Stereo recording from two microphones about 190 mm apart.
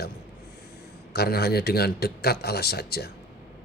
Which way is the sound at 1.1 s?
55° left (ahead or behind).